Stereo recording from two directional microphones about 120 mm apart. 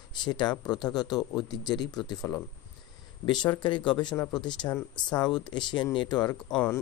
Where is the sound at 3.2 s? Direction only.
35° left (ahead or behind).